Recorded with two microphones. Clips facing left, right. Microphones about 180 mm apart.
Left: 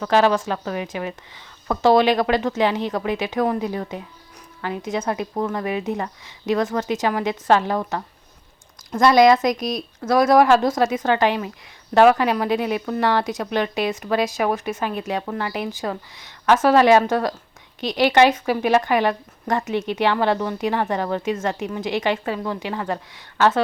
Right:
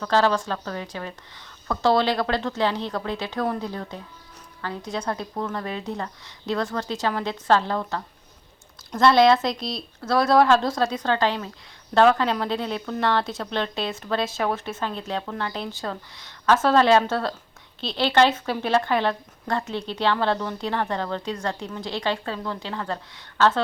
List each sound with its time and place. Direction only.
0.0 s speech: 15° left (ahead or behind)